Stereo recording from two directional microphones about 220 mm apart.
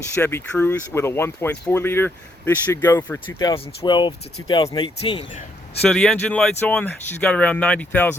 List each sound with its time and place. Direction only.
0.2 s speech: 10° left (ahead or behind)
5.8 s speech: 5° left (ahead or behind)